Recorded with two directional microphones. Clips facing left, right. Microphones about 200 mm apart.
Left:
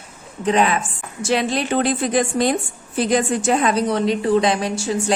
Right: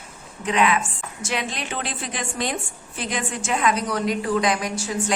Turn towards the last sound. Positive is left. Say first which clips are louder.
# left 5 dB
turn(degrees=30)  # may be behind; listen again after turning